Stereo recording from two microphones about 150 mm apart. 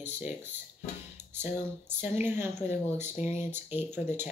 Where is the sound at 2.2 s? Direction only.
15° right (ahead or behind).